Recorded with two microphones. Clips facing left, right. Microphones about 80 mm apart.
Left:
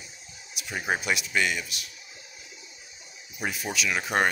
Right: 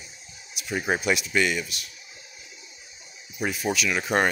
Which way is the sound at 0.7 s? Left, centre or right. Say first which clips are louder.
Right 3 dB; centre.